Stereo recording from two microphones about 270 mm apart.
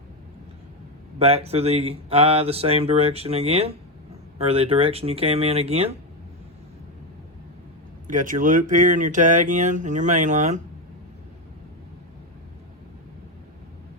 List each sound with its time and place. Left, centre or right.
1.2 s speech: right
8.0 s speech: right